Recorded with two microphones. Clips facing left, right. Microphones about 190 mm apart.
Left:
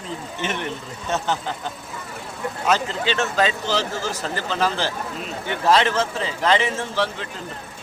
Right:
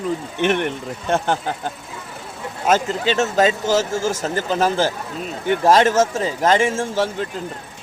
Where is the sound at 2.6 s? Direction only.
45° right (ahead or behind).